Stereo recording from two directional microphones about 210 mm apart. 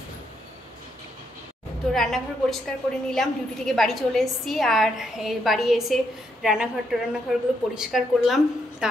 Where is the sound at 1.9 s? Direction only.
Centre (ahead or behind).